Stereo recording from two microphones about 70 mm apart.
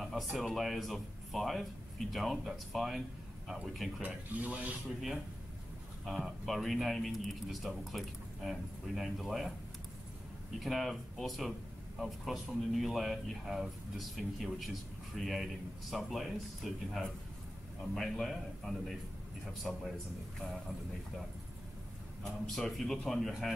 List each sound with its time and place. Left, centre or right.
0.0 s speech: centre
4.0 s speech: right
6.0 s speech: centre
10.6 s speech: centre
22.6 s speech: centre